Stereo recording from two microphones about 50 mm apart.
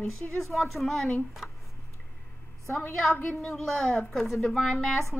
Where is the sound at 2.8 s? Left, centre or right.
Left.